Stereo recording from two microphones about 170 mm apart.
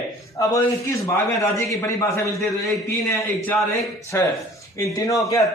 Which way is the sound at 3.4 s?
15° left (ahead or behind).